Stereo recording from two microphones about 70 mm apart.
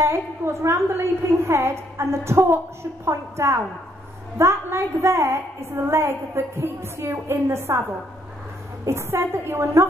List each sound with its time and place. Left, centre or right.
0.0 s a woman's voice: right
8.8 s a woman's voice: right